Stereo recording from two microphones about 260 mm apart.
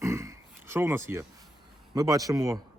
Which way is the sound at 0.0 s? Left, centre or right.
Centre.